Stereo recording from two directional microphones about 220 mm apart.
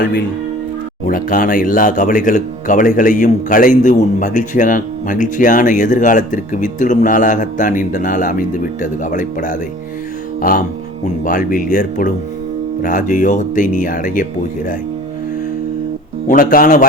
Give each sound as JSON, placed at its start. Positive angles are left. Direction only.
{"t": 1.0, "sound": "speech", "side_deg": 40}
{"t": 11.2, "sound": "speech", "side_deg": 40}
{"t": 16.2, "sound": "speech", "side_deg": 40}